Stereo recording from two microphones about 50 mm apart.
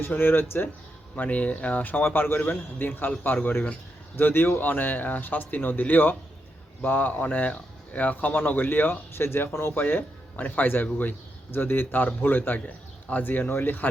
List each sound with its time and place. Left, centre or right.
0.2 s speech: left
1.1 s speech: left
4.6 s speech: left